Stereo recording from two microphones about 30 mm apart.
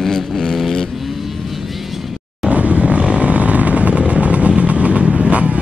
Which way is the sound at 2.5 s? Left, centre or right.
Right.